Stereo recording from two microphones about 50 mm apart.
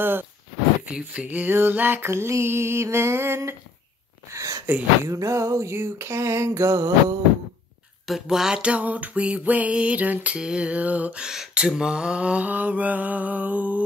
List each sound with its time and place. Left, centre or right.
0.0 s speech: right
0.8 s music: right
1.7 s mantra: right
2.0 s a sound: right
4.3 s a sound: right
5.0 s music: right
5.8 s a sound: right
8.1 s speech: centre
8.6 s music: right
11.2 s music: centre
12.4 s mantra: right